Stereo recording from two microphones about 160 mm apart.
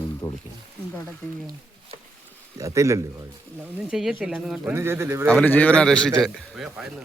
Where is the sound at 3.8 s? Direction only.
5° right (ahead or behind).